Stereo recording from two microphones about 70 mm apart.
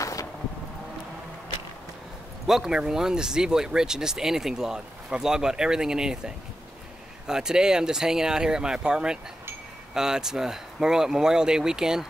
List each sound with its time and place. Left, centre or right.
0.0 s vehicle: left
2.4 s speech: centre